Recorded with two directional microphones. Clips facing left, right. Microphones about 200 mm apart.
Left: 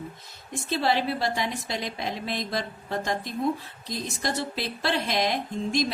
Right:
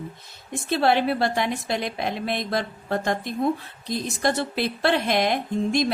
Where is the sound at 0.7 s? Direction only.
60° right (ahead or behind).